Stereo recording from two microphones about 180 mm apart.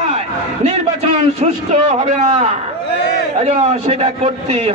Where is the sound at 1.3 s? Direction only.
40° right (ahead or behind).